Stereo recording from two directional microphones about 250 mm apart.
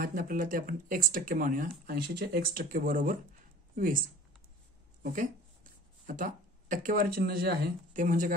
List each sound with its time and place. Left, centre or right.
0.0 s speech: right
5.0 s speech: right